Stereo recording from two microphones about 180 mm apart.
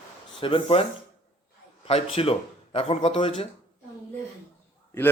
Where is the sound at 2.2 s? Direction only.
35° left (ahead or behind).